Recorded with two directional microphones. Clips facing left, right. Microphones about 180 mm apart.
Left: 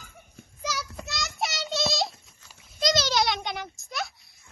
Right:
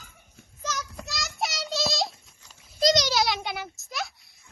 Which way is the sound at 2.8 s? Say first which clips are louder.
Right 3 dB; 20° right (ahead or behind).